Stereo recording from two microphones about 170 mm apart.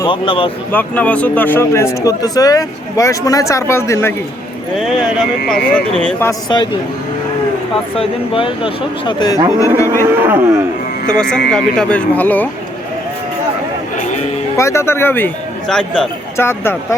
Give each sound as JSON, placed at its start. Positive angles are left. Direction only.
{"t": 0.0, "sound": "speech", "side_deg": 30}
{"t": 0.7, "sound": "speech", "side_deg": 10}
{"t": 4.8, "sound": "speech", "side_deg": 0}
{"t": 7.9, "sound": "speech", "side_deg": 30}
{"t": 10.0, "sound": "speech", "side_deg": -15}
{"t": 11.2, "sound": "speech", "side_deg": 5}
{"t": 13.9, "sound": "a sound", "side_deg": 45}
{"t": 14.5, "sound": "a man's voice", "side_deg": 15}